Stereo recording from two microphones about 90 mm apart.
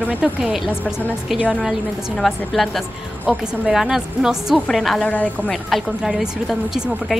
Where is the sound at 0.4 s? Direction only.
5° right (ahead or behind).